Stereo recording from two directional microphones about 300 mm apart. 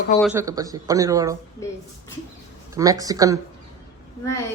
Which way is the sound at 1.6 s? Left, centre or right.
Centre.